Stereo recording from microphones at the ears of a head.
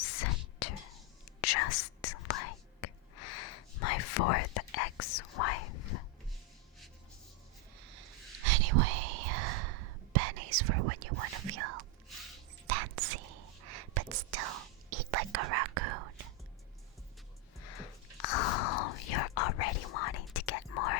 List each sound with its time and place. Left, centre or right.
0.0 s whispering: left
7.8 s whispering: right
17.6 s whispering: left